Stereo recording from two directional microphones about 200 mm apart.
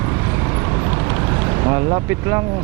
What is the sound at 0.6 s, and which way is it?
Vehicle, 20° right (ahead or behind).